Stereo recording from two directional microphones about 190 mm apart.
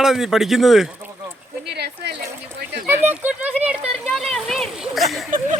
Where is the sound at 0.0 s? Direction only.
Centre (ahead or behind).